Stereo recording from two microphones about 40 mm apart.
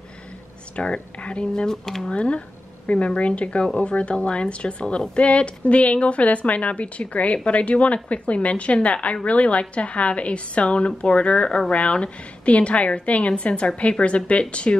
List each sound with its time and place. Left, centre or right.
0.7 s a woman's voice: left
1.4 s speech: centre
2.0 s a woman's voice: left